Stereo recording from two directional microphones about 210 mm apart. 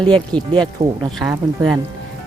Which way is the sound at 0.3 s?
20° right (ahead or behind).